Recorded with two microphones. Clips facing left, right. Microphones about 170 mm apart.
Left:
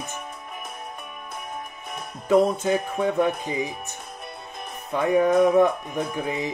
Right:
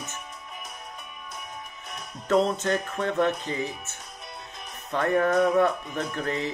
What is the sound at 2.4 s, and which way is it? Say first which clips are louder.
Music: left 4 dB; 10° left (ahead or behind).